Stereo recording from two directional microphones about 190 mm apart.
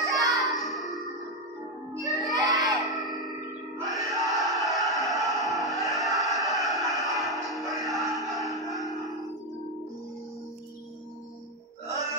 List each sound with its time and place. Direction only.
0.1 s music: 15° right (ahead or behind)
0.5 s music: centre (ahead or behind)
2.0 s children shouting: centre (ahead or behind)
2.3 s children shouting: 20° right (ahead or behind)
2.7 s a sound: 20° right (ahead or behind)
3.9 s music: centre (ahead or behind)